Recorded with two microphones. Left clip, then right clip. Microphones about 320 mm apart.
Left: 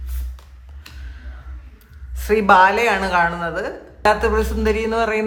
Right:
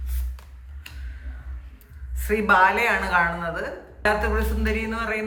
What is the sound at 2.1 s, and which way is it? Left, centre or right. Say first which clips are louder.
A woman's voice: left 6 dB; centre.